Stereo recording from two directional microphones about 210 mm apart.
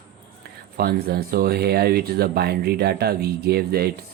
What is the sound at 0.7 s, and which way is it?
Speech, 45° right (ahead or behind).